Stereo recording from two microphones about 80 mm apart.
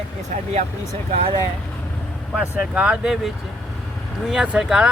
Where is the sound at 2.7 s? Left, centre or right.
Centre.